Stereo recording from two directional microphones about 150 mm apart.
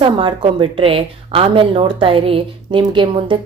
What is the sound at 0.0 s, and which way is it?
Speech, 35° right (ahead or behind).